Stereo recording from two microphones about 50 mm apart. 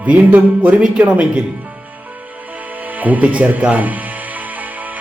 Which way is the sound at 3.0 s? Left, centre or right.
Right.